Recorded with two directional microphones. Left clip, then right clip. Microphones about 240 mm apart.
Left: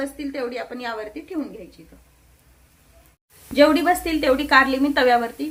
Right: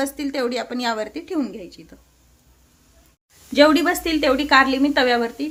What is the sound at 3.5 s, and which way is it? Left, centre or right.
A woman's voice, right.